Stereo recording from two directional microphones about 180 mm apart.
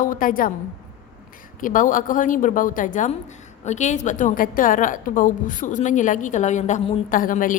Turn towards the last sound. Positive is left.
turn(degrees=45)  # may be behind; listen again after turning